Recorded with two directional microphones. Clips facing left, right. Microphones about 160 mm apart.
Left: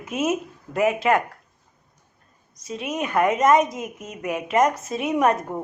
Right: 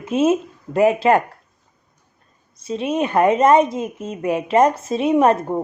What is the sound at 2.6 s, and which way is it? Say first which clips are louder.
A woman's voice: right 7 dB; 30° right (ahead or behind).